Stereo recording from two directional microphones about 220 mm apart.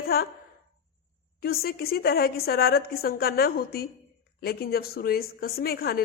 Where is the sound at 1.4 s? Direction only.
45° left (ahead or behind).